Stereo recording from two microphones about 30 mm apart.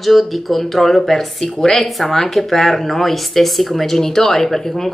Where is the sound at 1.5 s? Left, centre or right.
Left.